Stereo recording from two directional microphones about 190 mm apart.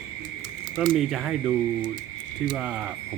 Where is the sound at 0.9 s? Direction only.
Centre (ahead or behind).